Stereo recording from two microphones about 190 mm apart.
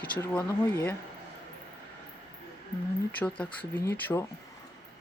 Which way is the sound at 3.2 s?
5° left (ahead or behind).